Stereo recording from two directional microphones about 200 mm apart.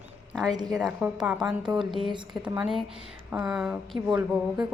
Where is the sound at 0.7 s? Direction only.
Centre (ahead or behind).